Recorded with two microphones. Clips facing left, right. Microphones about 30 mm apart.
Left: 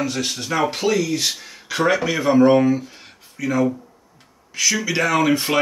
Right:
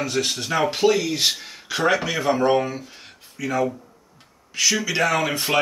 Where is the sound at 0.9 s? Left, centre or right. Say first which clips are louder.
Left 1 dB; right.